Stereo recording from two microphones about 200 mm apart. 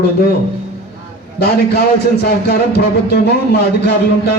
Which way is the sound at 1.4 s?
55° left (ahead or behind).